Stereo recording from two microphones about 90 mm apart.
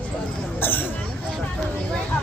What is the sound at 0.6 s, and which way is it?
Hubbub, 20° left (ahead or behind).